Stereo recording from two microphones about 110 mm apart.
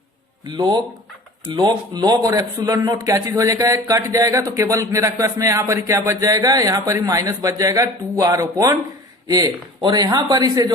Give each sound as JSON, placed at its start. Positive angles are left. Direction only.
{"t": 0.4, "sound": "a man's voice", "side_deg": -40}